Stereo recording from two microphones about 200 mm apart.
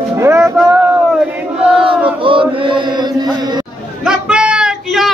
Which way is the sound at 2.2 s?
25° right (ahead or behind).